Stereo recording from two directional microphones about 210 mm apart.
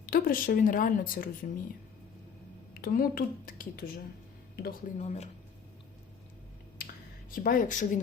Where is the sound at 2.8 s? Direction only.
45° left (ahead or behind).